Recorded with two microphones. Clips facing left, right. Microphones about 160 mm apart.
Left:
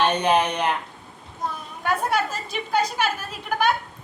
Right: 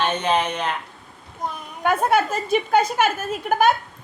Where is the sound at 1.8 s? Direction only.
55° right (ahead or behind).